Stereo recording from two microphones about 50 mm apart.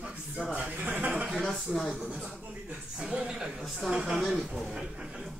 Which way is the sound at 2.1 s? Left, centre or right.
Centre.